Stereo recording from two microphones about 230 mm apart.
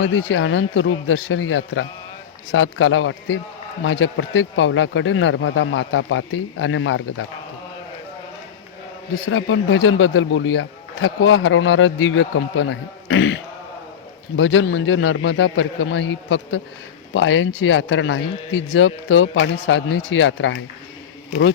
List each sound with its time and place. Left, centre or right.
0.0 s speech: left
9.2 s speech: left